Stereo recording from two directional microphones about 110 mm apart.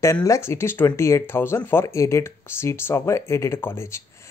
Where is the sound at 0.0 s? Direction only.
30° left (ahead or behind).